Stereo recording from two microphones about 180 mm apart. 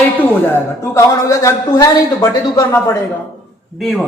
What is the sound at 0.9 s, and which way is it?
Speech, 15° left (ahead or behind).